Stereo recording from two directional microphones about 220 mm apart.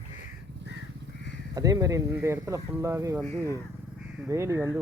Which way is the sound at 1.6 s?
15° right (ahead or behind).